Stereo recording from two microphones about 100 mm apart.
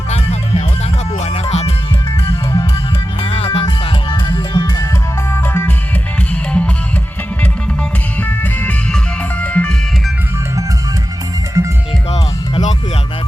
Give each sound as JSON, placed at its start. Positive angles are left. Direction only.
{"t": 0.1, "sound": "music", "side_deg": 90}
{"t": 3.2, "sound": "music", "side_deg": 80}
{"t": 3.6, "sound": "music", "side_deg": 45}
{"t": 5.3, "sound": "music", "side_deg": 25}
{"t": 8.2, "sound": "music", "side_deg": 20}
{"t": 11.6, "sound": "music", "side_deg": -30}